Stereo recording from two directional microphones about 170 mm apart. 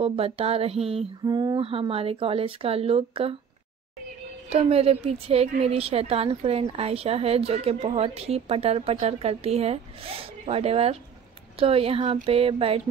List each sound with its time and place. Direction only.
0.0 s a woman's voice: 35° right (ahead or behind)
1.2 s a woman's voice: 25° right (ahead or behind)
4.5 s a woman's voice: 35° right (ahead or behind)